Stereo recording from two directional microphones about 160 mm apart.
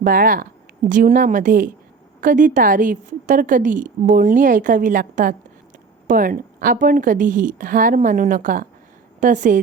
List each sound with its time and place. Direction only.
0.0 s a woman's voice: 60° right (ahead or behind)